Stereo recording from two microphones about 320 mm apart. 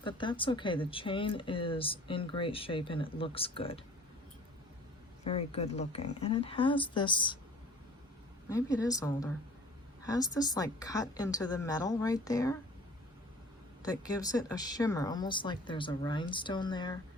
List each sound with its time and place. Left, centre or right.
0.0 s speech: centre
5.2 s speech: centre
8.4 s speech: centre
13.8 s speech: centre